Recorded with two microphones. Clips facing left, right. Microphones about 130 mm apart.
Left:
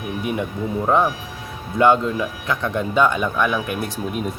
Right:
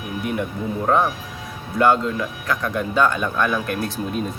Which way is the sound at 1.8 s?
20° left (ahead or behind).